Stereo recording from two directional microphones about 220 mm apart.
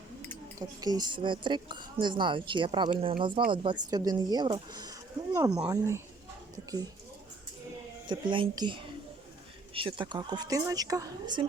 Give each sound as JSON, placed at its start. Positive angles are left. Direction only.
{"t": 0.8, "sound": "a woman's voice", "side_deg": -20}
{"t": 8.0, "sound": "a woman's voice", "side_deg": -20}